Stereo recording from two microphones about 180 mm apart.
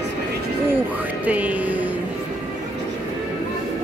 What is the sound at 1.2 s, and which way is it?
Music, 10° right (ahead or behind).